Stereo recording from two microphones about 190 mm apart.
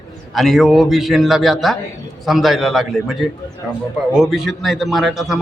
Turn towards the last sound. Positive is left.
turn(degrees=0)  # may be behind; listen again after turning